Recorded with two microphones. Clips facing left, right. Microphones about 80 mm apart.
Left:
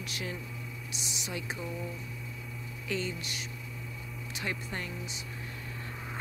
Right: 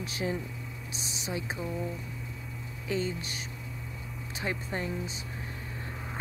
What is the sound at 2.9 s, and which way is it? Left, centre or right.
Speech, right.